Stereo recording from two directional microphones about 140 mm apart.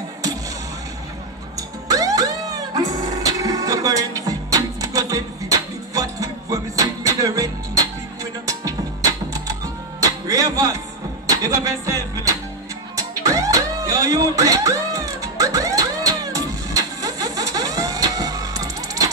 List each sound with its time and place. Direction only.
1.9 s music: 25° right (ahead or behind)
10.2 s music: 25° right (ahead or behind)